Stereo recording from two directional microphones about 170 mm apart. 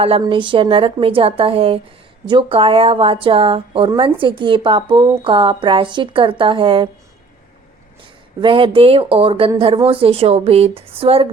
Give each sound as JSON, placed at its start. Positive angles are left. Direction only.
{"t": 0.2, "sound": "a woman's voice", "side_deg": -30}
{"t": 8.4, "sound": "a woman's voice", "side_deg": -30}